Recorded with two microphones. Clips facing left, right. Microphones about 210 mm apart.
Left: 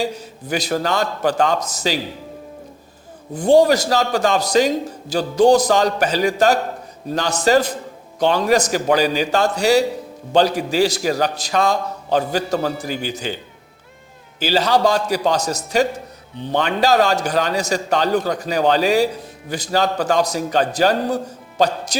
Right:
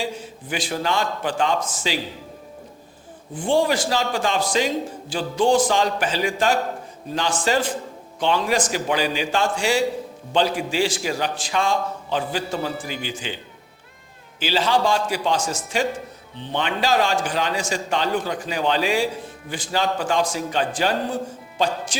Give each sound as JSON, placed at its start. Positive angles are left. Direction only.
{"t": 0.0, "sound": "a man's voice", "side_deg": 40}
{"t": 3.3, "sound": "a man's voice", "side_deg": 40}